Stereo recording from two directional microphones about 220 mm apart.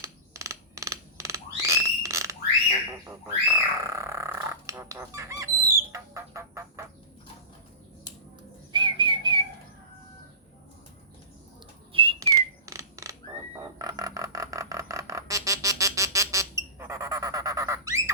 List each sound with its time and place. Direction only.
0.0 s frog: 15° right (ahead or behind)
5.7 s music: 15° right (ahead or behind)
8.7 s whistling: 20° right (ahead or behind)
11.9 s whistle: 25° right (ahead or behind)
12.2 s a sound: 15° right (ahead or behind)